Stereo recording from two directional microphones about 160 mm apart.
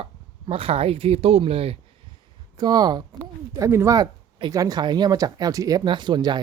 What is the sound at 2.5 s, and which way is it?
Speech, 25° right (ahead or behind).